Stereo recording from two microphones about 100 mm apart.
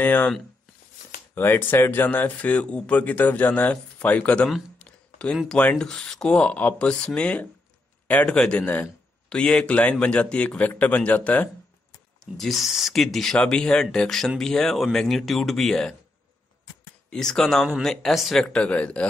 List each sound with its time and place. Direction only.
0.0 s speech: 15° left (ahead or behind)
1.3 s speech: 20° left (ahead or behind)
4.7 s a sound: 10° left (ahead or behind)
5.5 s speech: 10° left (ahead or behind)
12.2 s speech: centre (ahead or behind)
17.1 s speech: 5° left (ahead or behind)